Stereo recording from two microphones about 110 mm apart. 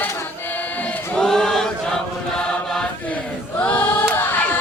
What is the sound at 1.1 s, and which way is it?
Chant, 5° left (ahead or behind).